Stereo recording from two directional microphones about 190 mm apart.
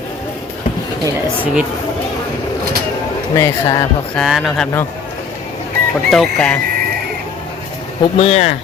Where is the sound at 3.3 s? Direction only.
15° left (ahead or behind).